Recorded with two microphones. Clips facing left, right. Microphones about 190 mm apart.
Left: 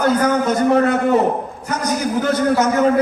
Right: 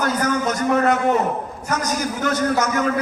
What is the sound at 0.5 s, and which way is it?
A man's voice, 30° left (ahead or behind).